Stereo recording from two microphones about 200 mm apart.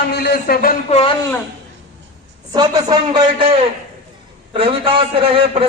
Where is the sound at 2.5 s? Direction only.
20° right (ahead or behind).